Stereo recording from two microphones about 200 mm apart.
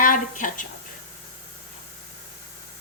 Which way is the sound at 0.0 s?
40° left (ahead or behind).